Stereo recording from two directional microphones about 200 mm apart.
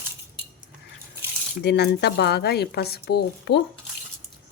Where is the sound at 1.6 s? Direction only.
55° left (ahead or behind).